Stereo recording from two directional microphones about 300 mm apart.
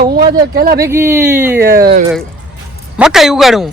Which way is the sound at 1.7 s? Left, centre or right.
Right.